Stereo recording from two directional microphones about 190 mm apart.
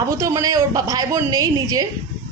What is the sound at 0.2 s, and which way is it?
Speech, 15° right (ahead or behind).